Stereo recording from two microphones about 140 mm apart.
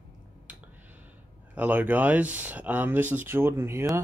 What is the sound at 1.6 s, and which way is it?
Speech, 10° right (ahead or behind).